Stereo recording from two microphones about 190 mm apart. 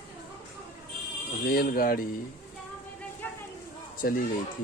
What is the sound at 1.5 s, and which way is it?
Speech, 50° left (ahead or behind).